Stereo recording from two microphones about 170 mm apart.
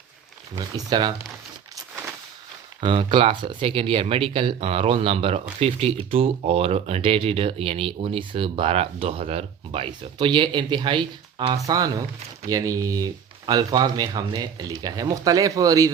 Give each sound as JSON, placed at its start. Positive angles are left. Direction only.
{"t": 0.5, "sound": "speech", "side_deg": -25}
{"t": 2.8, "sound": "speech", "side_deg": -30}